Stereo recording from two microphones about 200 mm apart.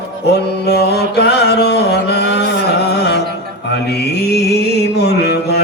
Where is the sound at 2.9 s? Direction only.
55° left (ahead or behind).